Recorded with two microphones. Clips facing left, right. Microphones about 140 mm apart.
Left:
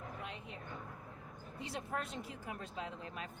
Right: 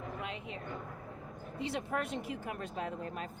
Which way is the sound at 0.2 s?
90° right.